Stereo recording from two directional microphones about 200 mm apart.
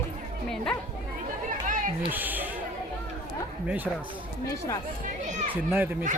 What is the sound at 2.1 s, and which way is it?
Speech, 10° right (ahead or behind).